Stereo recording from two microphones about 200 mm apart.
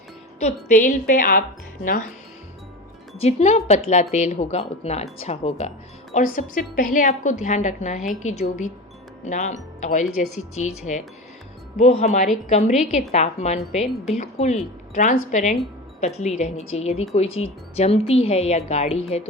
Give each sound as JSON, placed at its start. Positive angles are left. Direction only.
{"t": 0.3, "sound": "a woman's voice", "side_deg": 35}
{"t": 3.2, "sound": "a woman's voice", "side_deg": 30}
{"t": 17.2, "sound": "speech", "side_deg": 85}
{"t": 17.7, "sound": "a woman's voice", "side_deg": 30}